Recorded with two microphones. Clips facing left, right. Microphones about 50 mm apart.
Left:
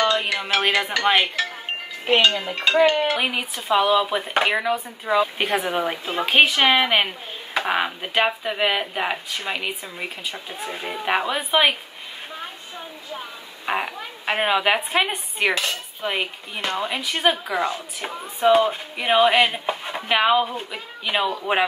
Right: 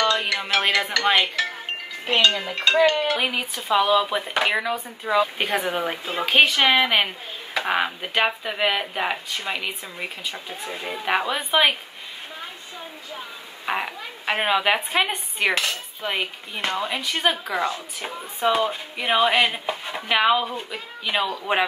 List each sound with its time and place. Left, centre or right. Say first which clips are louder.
0.0 s music: left 1 dB; centre
2.4 s speech: even; centre
2.8 s dishes: left 2 dB; centre
3.1 s speech: left 1 dB; centre
13.8 s speech: left 1 dB; centre
19.6 s speech: left 2 dB; centre
19.9 s speech: left 1 dB; centre